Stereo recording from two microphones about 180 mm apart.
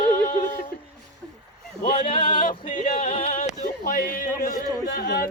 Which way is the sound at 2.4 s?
50° left (ahead or behind).